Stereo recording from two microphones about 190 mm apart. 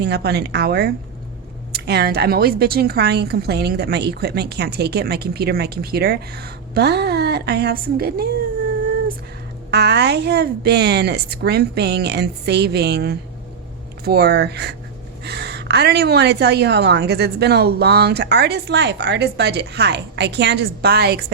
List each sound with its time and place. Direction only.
0.0 s speech: 60° right (ahead or behind)
9.7 s speech: 60° right (ahead or behind)